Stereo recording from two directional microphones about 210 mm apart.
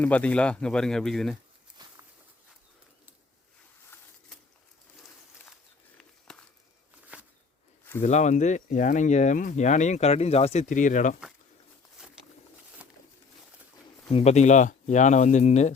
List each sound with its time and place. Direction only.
0.0 s speech: 5° left (ahead or behind)
1.8 s walk: 20° right (ahead or behind)
7.1 s walk: 5° right (ahead or behind)
8.0 s speech: 35° left (ahead or behind)
12.0 s a sound: 5° right (ahead or behind)
14.1 s speech: 30° left (ahead or behind)